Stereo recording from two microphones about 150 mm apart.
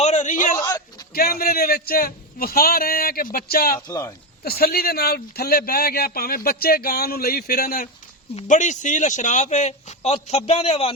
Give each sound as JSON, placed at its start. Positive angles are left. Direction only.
{"t": 0.0, "sound": "a sound", "side_deg": 50}
{"t": 0.6, "sound": "a sound", "side_deg": 25}
{"t": 1.1, "sound": "speech", "side_deg": 85}
{"t": 3.8, "sound": "speech", "side_deg": 25}
{"t": 4.4, "sound": "a man's voice", "side_deg": 90}
{"t": 8.4, "sound": "a man's voice", "side_deg": 55}